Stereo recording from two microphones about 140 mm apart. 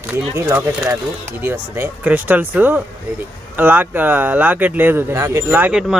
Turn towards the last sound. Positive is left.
turn(degrees=-5)  # may be behind; listen again after turning